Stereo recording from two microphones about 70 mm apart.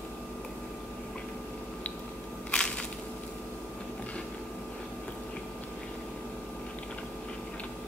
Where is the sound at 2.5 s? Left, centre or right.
Centre.